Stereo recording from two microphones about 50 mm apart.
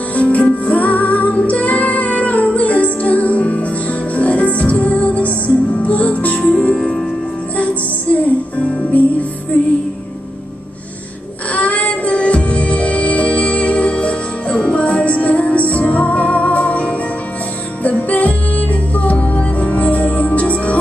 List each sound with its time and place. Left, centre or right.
0.1 s music: left
6.7 s music: centre
7.5 s music: left
11.5 s music: left